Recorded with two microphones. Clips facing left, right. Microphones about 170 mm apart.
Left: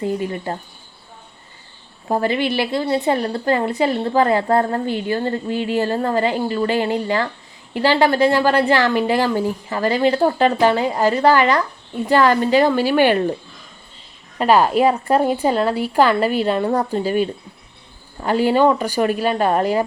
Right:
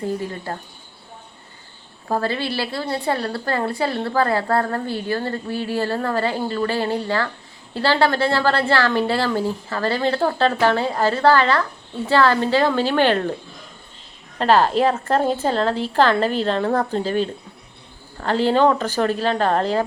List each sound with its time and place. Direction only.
0.0 s a woman's voice: 20° left (ahead or behind)
2.0 s a woman's voice: 20° left (ahead or behind)
14.3 s a woman's voice: 10° left (ahead or behind)